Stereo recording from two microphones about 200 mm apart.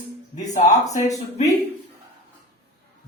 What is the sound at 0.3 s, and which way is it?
Speech, 15° left (ahead or behind).